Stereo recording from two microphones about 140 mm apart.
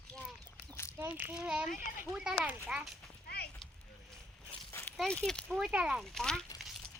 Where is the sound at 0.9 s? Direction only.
15° right (ahead or behind).